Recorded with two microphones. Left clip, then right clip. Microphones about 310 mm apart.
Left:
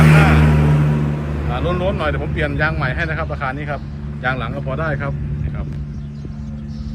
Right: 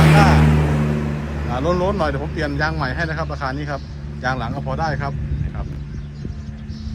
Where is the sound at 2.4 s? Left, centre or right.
Centre.